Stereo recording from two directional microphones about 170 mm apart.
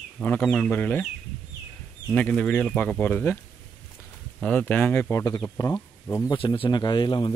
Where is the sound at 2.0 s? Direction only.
5° left (ahead or behind).